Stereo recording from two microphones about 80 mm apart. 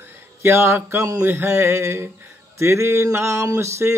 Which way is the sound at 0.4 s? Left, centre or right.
Right.